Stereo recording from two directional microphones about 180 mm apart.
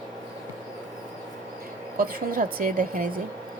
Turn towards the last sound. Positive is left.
turn(degrees=-50)  # may be behind; listen again after turning